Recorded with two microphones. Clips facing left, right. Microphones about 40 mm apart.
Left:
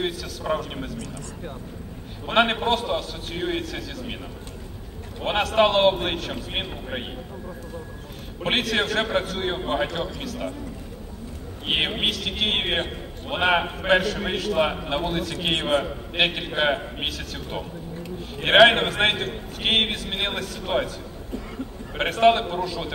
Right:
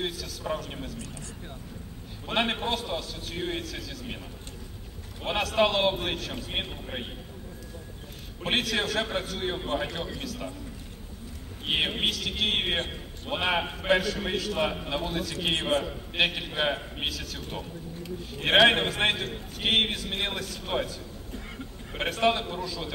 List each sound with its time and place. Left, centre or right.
0.5 s speech: left
2.2 s a man's voice: left
5.2 s a man's voice: left
8.5 s a man's voice: left
11.6 s a man's voice: left
22.1 s a man's voice: left